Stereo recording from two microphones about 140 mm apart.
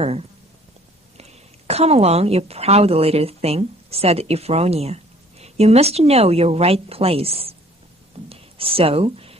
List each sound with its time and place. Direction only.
1.1 s a woman's voice: 50° right (ahead or behind)